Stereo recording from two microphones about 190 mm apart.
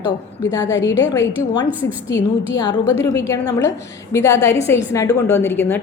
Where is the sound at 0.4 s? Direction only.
15° left (ahead or behind).